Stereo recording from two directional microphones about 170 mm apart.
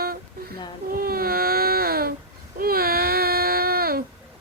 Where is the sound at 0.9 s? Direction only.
60° right (ahead or behind).